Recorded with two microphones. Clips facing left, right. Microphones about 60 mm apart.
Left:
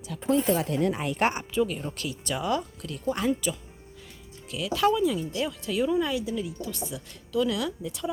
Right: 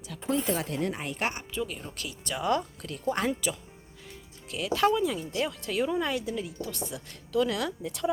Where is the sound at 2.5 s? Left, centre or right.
Right.